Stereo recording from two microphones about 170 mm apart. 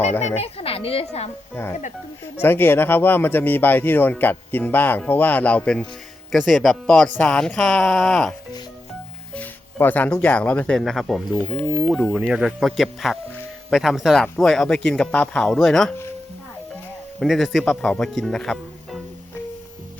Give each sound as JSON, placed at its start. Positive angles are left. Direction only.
{"t": 0.2, "sound": "speech", "side_deg": 40}
{"t": 1.6, "sound": "speech", "side_deg": 15}
{"t": 17.2, "sound": "speech", "side_deg": 0}